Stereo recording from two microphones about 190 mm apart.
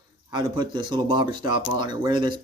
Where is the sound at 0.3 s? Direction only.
20° right (ahead or behind).